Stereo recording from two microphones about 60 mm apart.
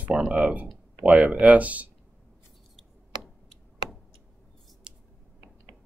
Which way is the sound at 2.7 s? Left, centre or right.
Centre.